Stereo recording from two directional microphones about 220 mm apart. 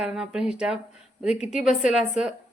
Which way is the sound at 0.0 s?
5° right (ahead or behind).